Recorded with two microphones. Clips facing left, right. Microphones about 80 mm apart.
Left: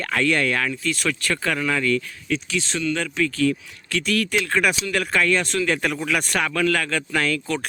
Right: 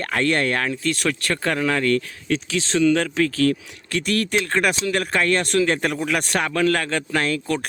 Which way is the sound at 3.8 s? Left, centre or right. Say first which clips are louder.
Even; right.